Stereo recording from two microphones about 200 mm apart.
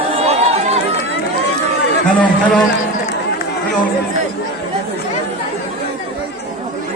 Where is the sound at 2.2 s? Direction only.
5° left (ahead or behind).